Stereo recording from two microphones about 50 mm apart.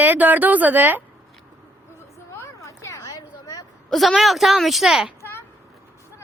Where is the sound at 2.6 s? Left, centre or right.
Left.